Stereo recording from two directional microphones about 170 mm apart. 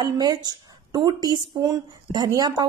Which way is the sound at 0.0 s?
25° right (ahead or behind).